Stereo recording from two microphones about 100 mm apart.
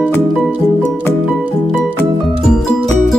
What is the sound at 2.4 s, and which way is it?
Music, 5° left (ahead or behind).